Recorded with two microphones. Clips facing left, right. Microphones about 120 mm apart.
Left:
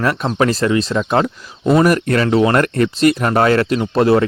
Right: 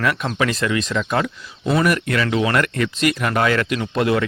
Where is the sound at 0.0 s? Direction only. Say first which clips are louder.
Left 4 dB; 35° left (ahead or behind).